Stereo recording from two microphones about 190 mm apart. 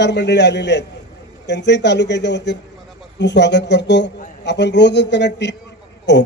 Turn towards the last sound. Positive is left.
turn(degrees=65)  # may be behind; listen again after turning